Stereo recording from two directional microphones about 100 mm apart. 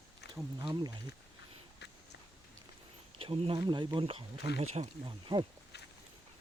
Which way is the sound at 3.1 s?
70° right (ahead or behind).